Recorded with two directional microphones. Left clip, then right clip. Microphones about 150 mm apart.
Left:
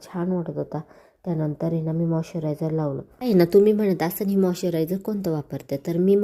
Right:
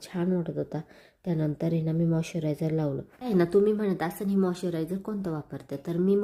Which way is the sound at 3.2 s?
20° left (ahead or behind).